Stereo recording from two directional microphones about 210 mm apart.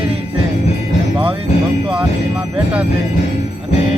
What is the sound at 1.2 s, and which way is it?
Speech, 25° right (ahead or behind).